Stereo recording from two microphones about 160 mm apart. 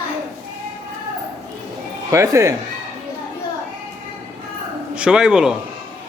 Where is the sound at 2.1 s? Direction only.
20° right (ahead or behind).